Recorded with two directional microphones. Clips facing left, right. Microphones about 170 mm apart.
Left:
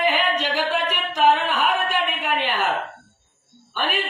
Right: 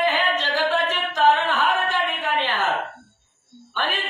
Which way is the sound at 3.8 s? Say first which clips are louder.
Left 2 dB; 15° left (ahead or behind).